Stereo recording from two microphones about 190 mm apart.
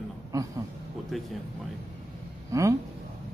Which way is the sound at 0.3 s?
15° right (ahead or behind).